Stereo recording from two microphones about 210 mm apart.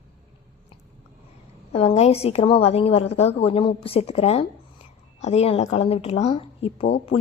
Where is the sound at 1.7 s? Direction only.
30° left (ahead or behind).